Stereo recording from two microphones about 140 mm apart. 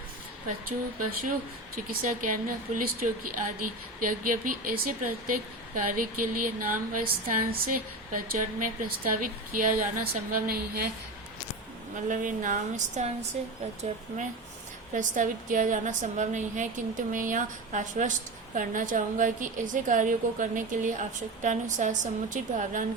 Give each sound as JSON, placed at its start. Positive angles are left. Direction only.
{"t": 1.7, "sound": "a woman's voice", "side_deg": -85}
{"t": 4.0, "sound": "a woman's voice", "side_deg": -75}
{"t": 12.0, "sound": "speech", "side_deg": -70}
{"t": 14.9, "sound": "speech", "side_deg": -70}